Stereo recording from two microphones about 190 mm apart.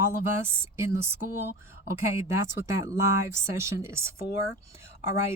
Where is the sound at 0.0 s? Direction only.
15° right (ahead or behind).